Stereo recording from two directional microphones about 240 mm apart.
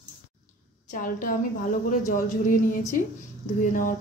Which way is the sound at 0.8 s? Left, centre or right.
Left.